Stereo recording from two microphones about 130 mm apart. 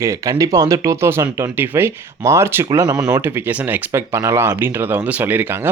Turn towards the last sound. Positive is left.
turn(degrees=-15)  # may be behind; listen again after turning